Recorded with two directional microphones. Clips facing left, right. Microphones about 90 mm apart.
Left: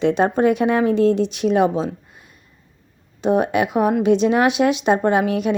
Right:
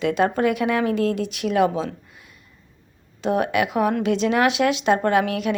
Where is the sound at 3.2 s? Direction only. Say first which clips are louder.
Left 3 dB; 25° left (ahead or behind).